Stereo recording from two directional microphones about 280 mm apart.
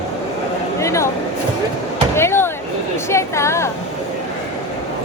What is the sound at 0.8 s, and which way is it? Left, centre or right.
Speech, centre.